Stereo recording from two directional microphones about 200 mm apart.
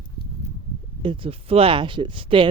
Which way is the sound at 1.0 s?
25° right (ahead or behind).